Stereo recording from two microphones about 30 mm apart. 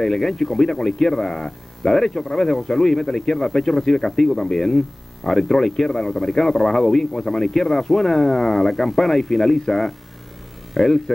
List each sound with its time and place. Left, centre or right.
0.0 s speech: centre